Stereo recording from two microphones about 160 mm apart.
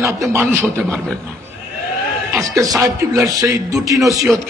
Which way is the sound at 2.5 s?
20° right (ahead or behind).